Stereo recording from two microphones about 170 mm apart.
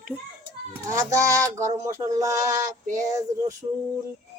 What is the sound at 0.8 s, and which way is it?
Speech, 20° right (ahead or behind).